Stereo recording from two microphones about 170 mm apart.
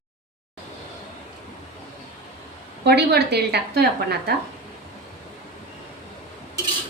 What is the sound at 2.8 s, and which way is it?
A woman's voice, 75° right (ahead or behind).